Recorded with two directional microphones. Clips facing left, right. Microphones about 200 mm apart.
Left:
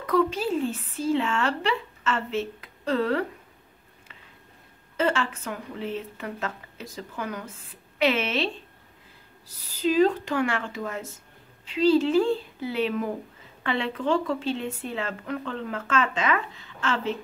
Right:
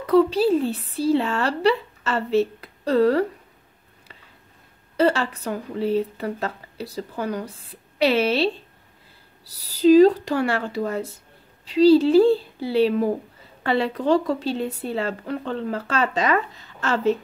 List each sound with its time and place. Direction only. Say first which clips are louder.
0.0 s speech: right 7 dB; 30° right (ahead or behind)
4.9 s speech: right 5 dB; 35° right (ahead or behind)